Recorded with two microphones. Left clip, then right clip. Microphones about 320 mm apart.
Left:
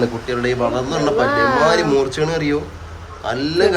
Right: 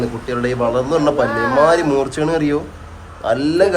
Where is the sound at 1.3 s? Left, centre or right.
Centre.